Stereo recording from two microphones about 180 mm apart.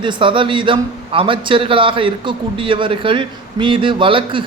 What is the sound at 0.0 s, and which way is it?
A man's voice, 25° right (ahead or behind).